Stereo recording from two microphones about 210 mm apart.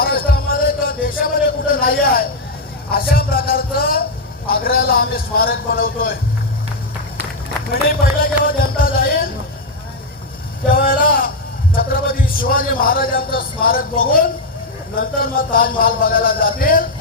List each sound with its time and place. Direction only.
0.0 s music: 45° left (ahead or behind)
2.9 s a man's voice: 45° left (ahead or behind)
7.7 s speech: 45° left (ahead or behind)
10.7 s a sound: 45° left (ahead or behind)
11.7 s a man's voice: 45° left (ahead or behind)